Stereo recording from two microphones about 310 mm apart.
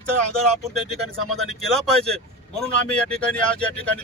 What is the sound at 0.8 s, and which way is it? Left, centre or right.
Speech, centre.